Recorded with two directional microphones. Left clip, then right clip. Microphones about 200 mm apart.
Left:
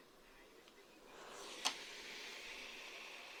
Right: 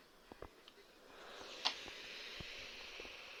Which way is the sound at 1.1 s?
35° left (ahead or behind).